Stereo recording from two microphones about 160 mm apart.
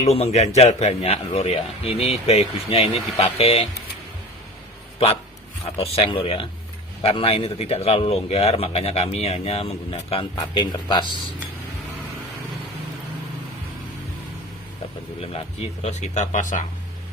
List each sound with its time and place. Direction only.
0.0 s a man's voice: 40° left (ahead or behind)
5.7 s a man's voice: 40° left (ahead or behind)
15.3 s speech: 40° left (ahead or behind)